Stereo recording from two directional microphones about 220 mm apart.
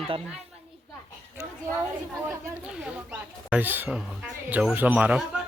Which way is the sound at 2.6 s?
5° right (ahead or behind).